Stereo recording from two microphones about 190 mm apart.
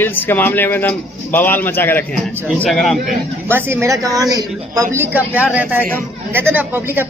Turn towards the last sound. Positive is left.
turn(degrees=-10)  # may be behind; listen again after turning